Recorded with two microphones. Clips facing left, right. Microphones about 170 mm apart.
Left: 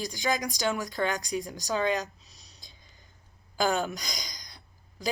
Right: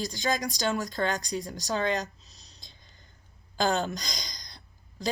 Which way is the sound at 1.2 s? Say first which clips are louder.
Left 1 dB; 35° right (ahead or behind).